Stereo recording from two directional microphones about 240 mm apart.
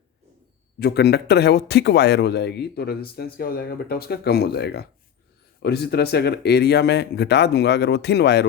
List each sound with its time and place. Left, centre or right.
0.8 s speech: left